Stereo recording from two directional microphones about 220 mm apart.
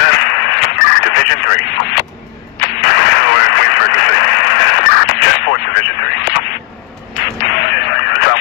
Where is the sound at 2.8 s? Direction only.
50° left (ahead or behind).